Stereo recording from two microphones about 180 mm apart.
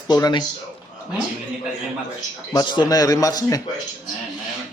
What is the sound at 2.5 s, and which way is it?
Speech, 25° left (ahead or behind).